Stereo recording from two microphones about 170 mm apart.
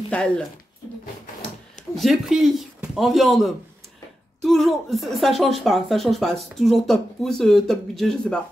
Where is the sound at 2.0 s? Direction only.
Centre (ahead or behind).